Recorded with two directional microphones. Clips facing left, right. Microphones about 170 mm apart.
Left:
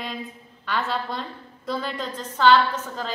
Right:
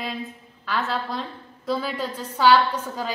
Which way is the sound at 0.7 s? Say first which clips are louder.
Even; centre (ahead or behind).